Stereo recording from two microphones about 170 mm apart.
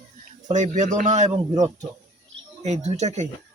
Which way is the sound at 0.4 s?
45° right (ahead or behind).